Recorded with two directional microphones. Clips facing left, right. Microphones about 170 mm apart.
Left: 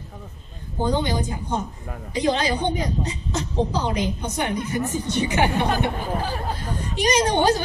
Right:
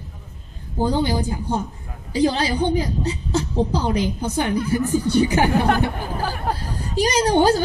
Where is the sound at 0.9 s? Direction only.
35° right (ahead or behind).